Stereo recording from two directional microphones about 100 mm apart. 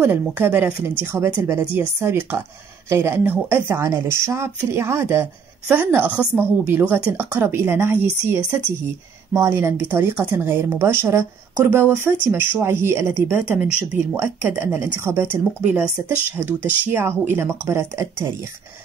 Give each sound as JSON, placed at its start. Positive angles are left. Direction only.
{"t": 0.0, "sound": "speech", "side_deg": -20}